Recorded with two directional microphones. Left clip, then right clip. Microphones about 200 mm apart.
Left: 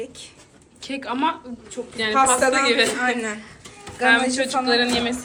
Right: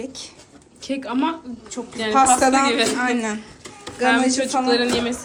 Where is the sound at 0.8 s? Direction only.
15° right (ahead or behind).